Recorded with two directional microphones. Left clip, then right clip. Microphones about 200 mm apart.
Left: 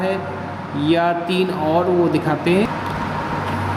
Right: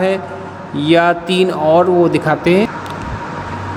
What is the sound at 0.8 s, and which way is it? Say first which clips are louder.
Speech: right 6 dB; 45° right (ahead or behind).